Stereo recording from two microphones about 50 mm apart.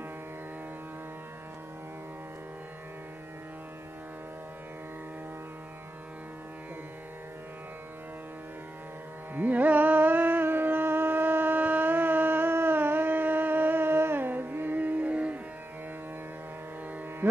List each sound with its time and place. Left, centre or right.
9.3 s carnatic music: right